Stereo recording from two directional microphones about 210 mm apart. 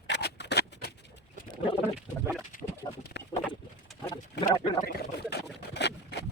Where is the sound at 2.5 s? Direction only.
40° left (ahead or behind).